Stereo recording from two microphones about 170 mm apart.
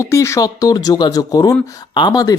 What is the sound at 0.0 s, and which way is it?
Speech, 15° left (ahead or behind).